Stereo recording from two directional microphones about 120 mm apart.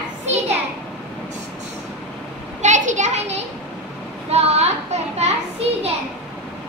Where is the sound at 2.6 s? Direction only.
85° right.